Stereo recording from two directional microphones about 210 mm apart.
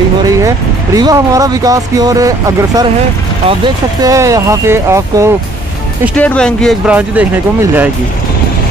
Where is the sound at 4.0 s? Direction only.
15° right (ahead or behind).